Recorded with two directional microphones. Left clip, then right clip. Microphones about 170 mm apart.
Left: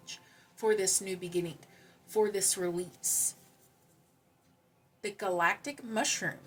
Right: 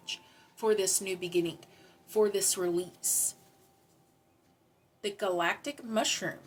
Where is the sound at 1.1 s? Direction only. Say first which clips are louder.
Right 4 dB; 20° right (ahead or behind).